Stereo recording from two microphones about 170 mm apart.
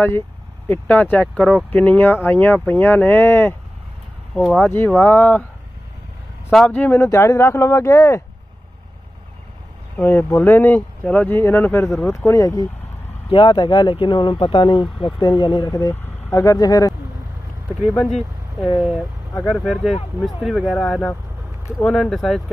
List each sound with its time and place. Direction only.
0.7 s speech: 10° left (ahead or behind)
4.4 s speech: 5° left (ahead or behind)
6.5 s speech: 5° left (ahead or behind)
9.9 s speech: 15° left (ahead or behind)
18.8 s speech: centre (ahead or behind)